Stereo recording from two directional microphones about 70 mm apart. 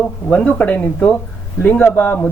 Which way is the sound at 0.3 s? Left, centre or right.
Centre.